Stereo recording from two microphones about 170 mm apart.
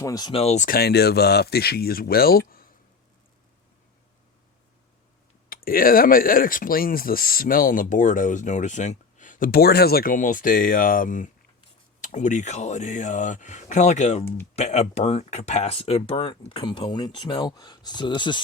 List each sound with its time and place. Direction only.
0.0 s speech: 20° left (ahead or behind); by 0.8 s 45° left (ahead or behind)
0.8 s speech: 70° left (ahead or behind)
2.5 s a sound: 60° left (ahead or behind)
5.5 s speech: 55° left (ahead or behind); by 18.4 s 30° left (ahead or behind)